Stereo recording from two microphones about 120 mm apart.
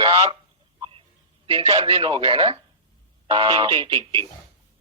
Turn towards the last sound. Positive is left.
turn(degrees=-45)  # may be behind; listen again after turning